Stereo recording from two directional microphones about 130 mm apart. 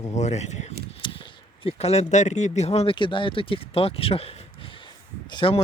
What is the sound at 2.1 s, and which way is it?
Speech, 65° left (ahead or behind).